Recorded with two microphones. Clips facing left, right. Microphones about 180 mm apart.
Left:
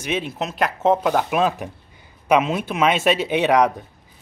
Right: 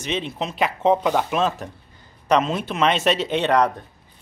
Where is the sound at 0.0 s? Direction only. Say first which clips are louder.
Left 1 dB; 5° left (ahead or behind).